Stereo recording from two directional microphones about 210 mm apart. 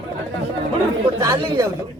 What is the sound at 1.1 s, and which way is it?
Speech, 15° right (ahead or behind).